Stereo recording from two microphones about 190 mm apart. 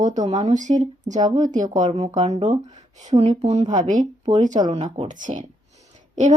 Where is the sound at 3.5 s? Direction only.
35° right (ahead or behind).